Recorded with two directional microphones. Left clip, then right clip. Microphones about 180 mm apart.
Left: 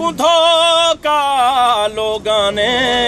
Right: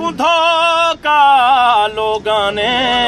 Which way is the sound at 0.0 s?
5° left (ahead or behind).